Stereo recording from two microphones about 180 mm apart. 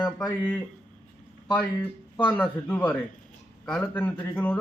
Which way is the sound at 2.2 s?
10° left (ahead or behind).